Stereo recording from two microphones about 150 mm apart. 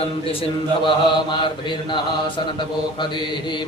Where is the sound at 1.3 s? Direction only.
30° left (ahead or behind).